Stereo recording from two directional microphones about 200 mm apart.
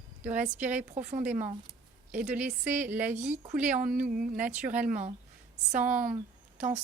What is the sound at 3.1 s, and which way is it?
A woman's voice, 35° right (ahead or behind).